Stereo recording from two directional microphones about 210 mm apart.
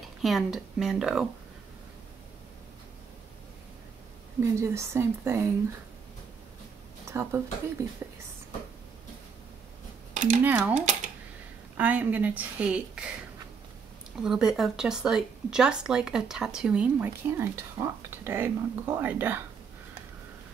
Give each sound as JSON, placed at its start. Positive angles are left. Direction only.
{"t": 0.2, "sound": "speech", "side_deg": 0}
{"t": 4.4, "sound": "speech", "side_deg": -15}
{"t": 7.1, "sound": "speech", "side_deg": -10}
{"t": 10.1, "sound": "a sound", "side_deg": -35}
{"t": 10.4, "sound": "speech", "side_deg": -10}
{"t": 14.2, "sound": "speech", "side_deg": 0}